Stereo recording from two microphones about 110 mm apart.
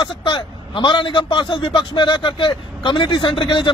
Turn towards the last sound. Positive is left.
turn(degrees=50)  # may be behind; listen again after turning